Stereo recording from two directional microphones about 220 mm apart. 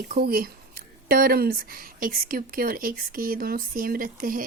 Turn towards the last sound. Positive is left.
turn(degrees=-40)  # may be behind; listen again after turning